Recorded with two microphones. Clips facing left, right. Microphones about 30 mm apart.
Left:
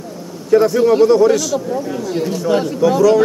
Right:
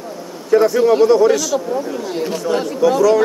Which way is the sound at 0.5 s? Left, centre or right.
Centre.